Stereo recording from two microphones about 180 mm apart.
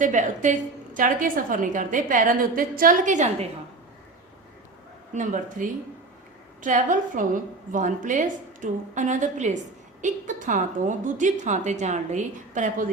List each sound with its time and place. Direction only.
0.0 s a woman's voice: 45° right (ahead or behind)
5.1 s a woman's voice: 45° right (ahead or behind)